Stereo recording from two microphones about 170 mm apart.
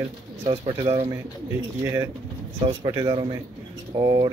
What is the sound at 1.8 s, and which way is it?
Speech, 15° right (ahead or behind).